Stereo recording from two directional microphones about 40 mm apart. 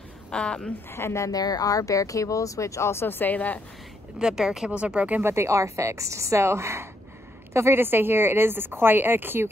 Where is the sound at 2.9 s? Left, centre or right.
Left.